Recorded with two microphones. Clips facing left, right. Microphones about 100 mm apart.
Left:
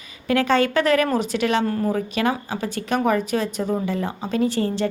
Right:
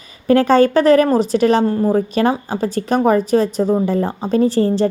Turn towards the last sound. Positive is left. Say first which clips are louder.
# right 7 dB
turn(degrees=-35)  # may be behind; listen again after turning